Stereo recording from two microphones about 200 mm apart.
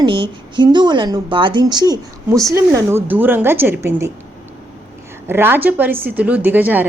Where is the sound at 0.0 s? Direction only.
25° right (ahead or behind).